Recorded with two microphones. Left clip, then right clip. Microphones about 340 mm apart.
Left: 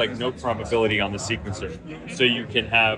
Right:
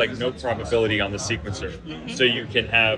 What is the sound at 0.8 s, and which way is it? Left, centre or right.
Speech, centre.